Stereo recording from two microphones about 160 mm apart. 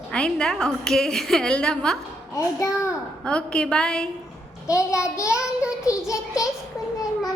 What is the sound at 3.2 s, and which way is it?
Speech, 5° left (ahead or behind).